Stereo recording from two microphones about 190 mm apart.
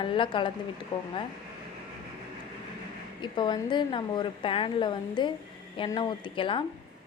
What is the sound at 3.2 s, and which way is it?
A woman's voice, 25° left (ahead or behind).